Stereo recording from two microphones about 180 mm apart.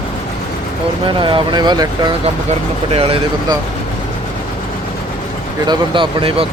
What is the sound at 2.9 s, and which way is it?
Speech, 30° right (ahead or behind).